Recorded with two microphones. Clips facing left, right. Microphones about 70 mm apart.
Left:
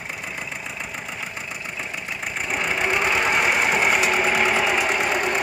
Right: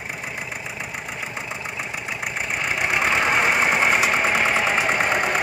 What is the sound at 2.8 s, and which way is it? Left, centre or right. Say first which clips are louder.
Sewing machine: right 1 dB; centre.